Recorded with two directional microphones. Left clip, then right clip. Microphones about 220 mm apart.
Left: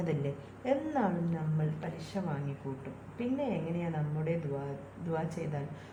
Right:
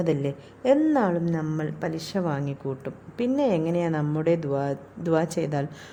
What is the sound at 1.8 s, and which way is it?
Speech, 50° right (ahead or behind).